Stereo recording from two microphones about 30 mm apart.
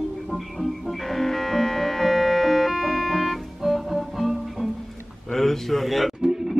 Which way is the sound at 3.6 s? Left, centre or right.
Centre.